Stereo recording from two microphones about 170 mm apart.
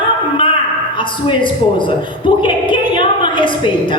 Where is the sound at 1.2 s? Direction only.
30° left (ahead or behind).